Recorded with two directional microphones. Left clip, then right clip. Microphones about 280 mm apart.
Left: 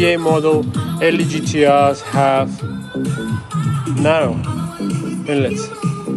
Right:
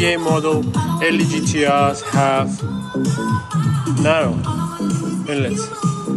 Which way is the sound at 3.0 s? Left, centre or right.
Right.